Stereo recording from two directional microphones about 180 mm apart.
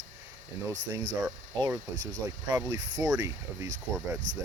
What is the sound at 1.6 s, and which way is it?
Speech, 20° right (ahead or behind).